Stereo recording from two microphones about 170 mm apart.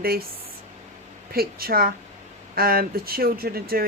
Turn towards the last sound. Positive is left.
turn(degrees=-60)  # may be behind; listen again after turning